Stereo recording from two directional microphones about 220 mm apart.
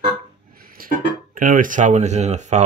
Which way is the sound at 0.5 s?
40° right (ahead or behind).